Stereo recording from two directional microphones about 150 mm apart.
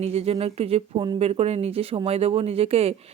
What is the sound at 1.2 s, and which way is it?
Speech, 45° right (ahead or behind).